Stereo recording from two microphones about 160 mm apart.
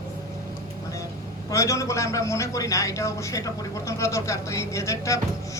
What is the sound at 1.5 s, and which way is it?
A man's voice, 20° left (ahead or behind).